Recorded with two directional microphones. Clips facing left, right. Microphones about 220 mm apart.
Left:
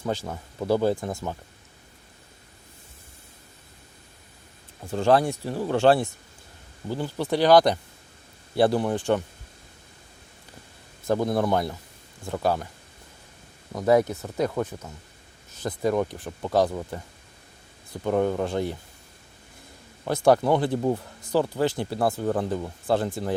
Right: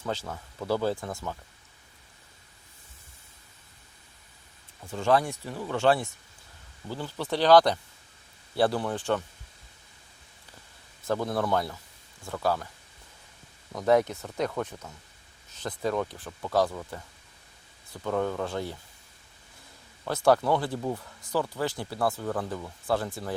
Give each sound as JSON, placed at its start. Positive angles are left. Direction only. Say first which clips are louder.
{"t": 0.0, "sound": "speech", "louder": "left 4 dB", "side_deg": 15}
{"t": 4.8, "sound": "speech", "louder": "left 4 dB", "side_deg": 35}
{"t": 6.8, "sound": "speech", "louder": "left 6 dB", "side_deg": 15}
{"t": 11.0, "sound": "speech", "louder": "left 5 dB", "side_deg": 15}
{"t": 13.7, "sound": "speech", "louder": "left 3 dB", "side_deg": 10}
{"t": 20.1, "sound": "speech", "louder": "left 3 dB", "side_deg": 15}